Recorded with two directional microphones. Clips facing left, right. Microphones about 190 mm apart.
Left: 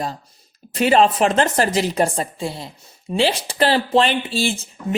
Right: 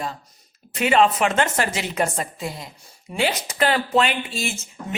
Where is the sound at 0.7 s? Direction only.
35° left (ahead or behind).